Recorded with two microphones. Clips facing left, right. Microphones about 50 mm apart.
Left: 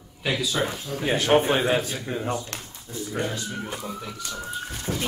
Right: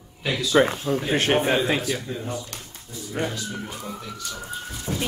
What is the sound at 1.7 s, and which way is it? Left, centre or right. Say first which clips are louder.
Speech: even; right.